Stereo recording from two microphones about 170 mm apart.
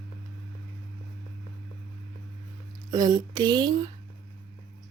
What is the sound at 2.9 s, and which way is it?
Speech, 20° right (ahead or behind).